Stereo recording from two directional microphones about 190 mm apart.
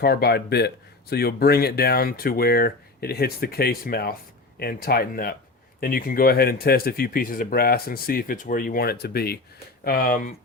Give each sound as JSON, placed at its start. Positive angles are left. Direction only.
{"t": 0.0, "sound": "speech", "side_deg": 55}